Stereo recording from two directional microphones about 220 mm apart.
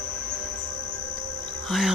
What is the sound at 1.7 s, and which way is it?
Speech, centre (ahead or behind).